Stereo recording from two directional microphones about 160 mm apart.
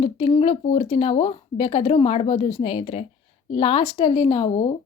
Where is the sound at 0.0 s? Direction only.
35° left (ahead or behind).